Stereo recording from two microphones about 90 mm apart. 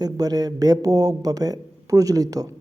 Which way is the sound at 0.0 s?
45° right (ahead or behind).